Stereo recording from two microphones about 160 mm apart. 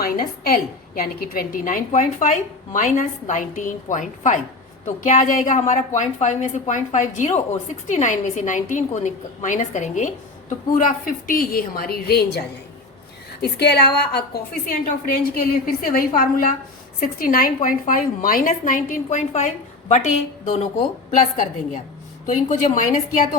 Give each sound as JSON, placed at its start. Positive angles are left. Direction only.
{"t": 0.0, "sound": "a woman's voice", "side_deg": 70}
{"t": 10.8, "sound": "a woman's voice", "side_deg": 60}
{"t": 13.4, "sound": "a woman's voice", "side_deg": 90}
{"t": 14.3, "sound": "a woman's voice", "side_deg": 65}
{"t": 22.4, "sound": "a woman's voice", "side_deg": 50}